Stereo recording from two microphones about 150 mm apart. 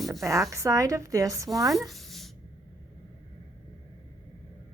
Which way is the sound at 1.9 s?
Centre (ahead or behind).